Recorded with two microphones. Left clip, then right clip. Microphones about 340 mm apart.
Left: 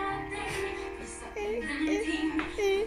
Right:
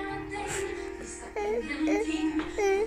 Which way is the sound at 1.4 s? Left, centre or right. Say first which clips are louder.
Right 2 dB; right.